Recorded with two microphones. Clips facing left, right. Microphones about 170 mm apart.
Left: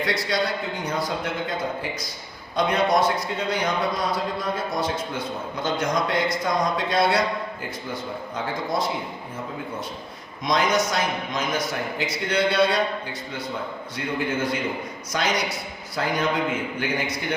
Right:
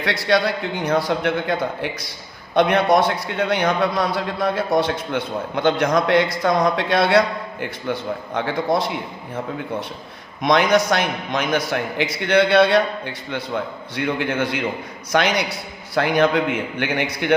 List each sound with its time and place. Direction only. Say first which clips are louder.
0.0 s a man's voice: right 5 dB; 70° right (ahead or behind)
10.4 s a man's voice: right 5 dB; 65° right (ahead or behind)